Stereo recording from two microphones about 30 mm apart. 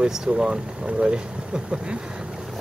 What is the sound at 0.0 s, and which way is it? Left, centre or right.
Speech, right.